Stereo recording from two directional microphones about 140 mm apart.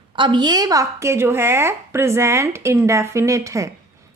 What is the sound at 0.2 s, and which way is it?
A woman's voice, 35° right (ahead or behind).